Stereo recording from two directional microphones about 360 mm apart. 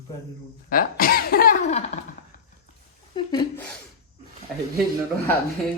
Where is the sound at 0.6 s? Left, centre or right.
Left.